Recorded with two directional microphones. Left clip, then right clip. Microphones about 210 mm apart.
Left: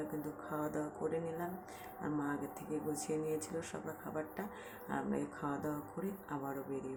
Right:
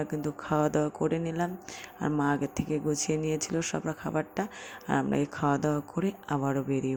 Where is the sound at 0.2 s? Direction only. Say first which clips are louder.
Right 12 dB; 40° right (ahead or behind).